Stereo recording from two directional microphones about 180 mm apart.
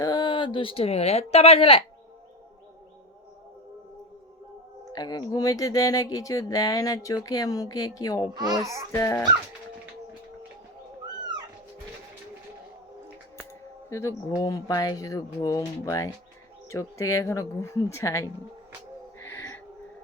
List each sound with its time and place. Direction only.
0.0 s speech: 20° left (ahead or behind)
4.9 s speech: 20° left (ahead or behind)
8.3 s a child's voice: 20° right (ahead or behind)
8.9 s speech: 15° left (ahead or behind)
13.9 s speech: 15° left (ahead or behind)
19.2 s a sound: 15° left (ahead or behind)